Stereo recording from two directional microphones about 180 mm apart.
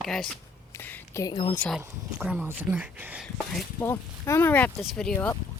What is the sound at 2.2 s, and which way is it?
Speech, 5° right (ahead or behind).